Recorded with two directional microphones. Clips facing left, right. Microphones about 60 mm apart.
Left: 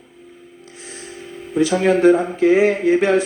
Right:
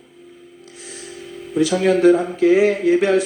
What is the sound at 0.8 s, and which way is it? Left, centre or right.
Speech, left.